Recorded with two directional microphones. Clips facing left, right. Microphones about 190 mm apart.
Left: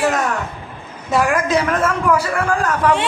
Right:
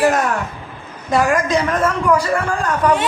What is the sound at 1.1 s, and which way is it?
Speech, 5° left (ahead or behind).